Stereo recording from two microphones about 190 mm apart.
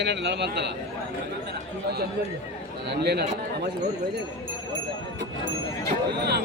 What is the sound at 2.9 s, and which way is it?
Speech, 60° right (ahead or behind).